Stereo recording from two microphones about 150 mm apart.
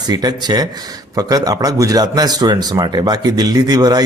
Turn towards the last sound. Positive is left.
turn(degrees=-25)  # may be behind; listen again after turning